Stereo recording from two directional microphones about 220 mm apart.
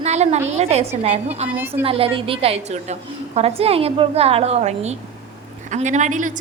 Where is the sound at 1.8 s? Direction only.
25° right (ahead or behind).